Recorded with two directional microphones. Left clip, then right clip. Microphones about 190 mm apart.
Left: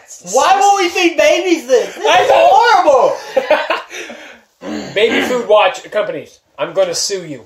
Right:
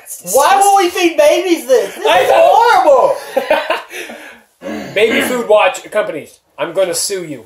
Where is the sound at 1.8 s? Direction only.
Centre (ahead or behind).